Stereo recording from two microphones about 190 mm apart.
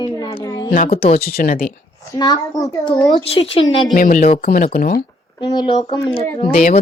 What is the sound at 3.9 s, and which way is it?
Speech, 45° left (ahead or behind).